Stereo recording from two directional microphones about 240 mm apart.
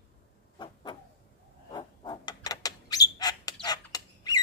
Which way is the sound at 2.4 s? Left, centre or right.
Centre.